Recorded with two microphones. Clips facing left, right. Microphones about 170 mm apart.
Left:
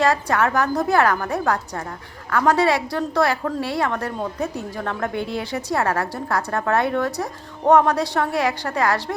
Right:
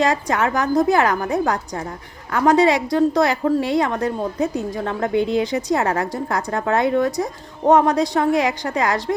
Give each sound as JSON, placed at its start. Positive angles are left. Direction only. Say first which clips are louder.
{"t": 0.0, "sound": "a woman's voice", "louder": "even", "side_deg": -15}